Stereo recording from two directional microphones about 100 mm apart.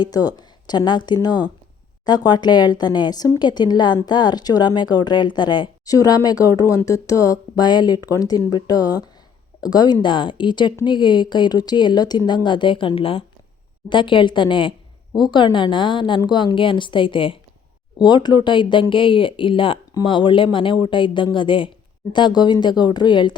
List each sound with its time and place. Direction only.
0.0 s a woman's voice: 40° left (ahead or behind); by 13.2 s 65° left (ahead or behind)
13.9 s a woman's voice: 55° left (ahead or behind)
18.0 s speech: 45° left (ahead or behind)
19.9 s a woman's voice: 50° left (ahead or behind)